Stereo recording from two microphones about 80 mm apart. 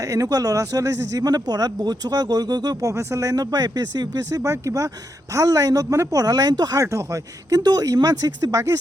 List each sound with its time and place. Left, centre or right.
0.0 s speech: right
2.9 s speech: right
6.8 s speech: right
7.5 s speech: right